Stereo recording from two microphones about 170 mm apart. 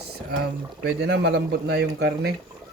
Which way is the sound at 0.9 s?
90° right.